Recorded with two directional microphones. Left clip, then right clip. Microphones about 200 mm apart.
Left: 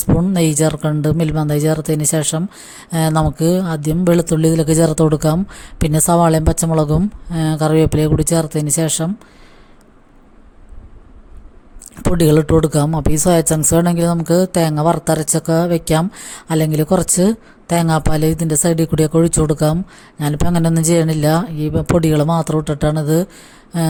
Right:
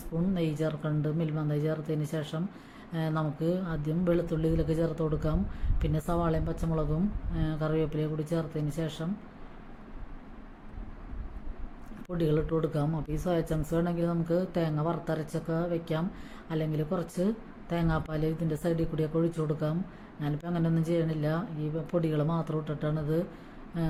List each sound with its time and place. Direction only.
0.3 s speech: 55° left (ahead or behind)
12.1 s speech: 55° left (ahead or behind)